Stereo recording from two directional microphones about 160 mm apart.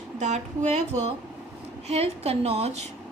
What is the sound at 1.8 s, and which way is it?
Speech, 40° right (ahead or behind).